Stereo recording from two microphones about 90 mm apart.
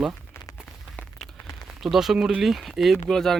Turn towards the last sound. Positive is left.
turn(degrees=5)  # may be behind; listen again after turning